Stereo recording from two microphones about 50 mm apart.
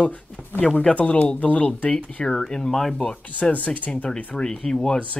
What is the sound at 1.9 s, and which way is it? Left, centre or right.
Speech, centre.